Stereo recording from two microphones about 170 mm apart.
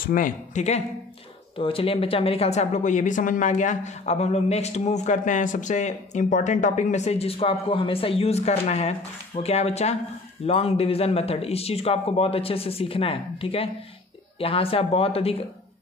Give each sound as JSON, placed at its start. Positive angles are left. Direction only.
{"t": 0.0, "sound": "speech", "side_deg": 55}